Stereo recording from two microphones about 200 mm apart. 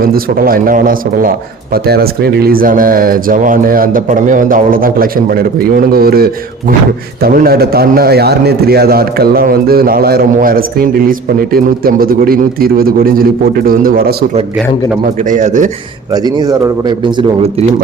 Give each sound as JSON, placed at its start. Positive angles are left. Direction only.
{"t": 0.0, "sound": "a man's voice", "side_deg": -45}
{"t": 15.3, "sound": "speech", "side_deg": -40}
{"t": 16.1, "sound": "speech", "side_deg": -20}